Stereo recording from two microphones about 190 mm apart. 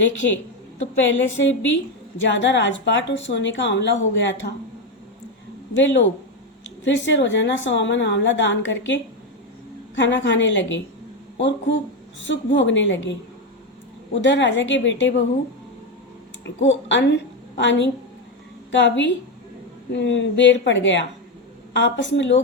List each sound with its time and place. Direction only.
0.9 s a woman's voice: 80° left
5.7 s a woman's voice: 75° left (ahead or behind)
16.6 s a woman's voice: 70° left (ahead or behind)